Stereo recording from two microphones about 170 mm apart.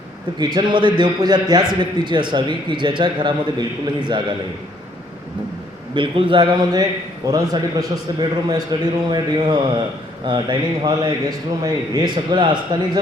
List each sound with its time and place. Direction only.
0.3 s a man's voice: 25° right (ahead or behind)
5.9 s a man's voice: 30° right (ahead or behind)